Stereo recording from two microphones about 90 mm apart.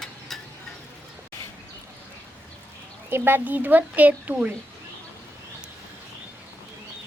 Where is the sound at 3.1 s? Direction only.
25° right (ahead or behind).